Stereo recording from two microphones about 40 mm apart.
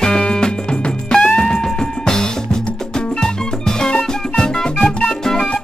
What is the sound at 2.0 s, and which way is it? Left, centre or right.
Music, centre.